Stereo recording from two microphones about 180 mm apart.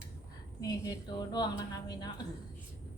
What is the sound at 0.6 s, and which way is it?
Speech, 20° left (ahead or behind).